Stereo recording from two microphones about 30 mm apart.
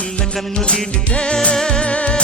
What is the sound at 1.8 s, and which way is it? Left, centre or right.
Music, left.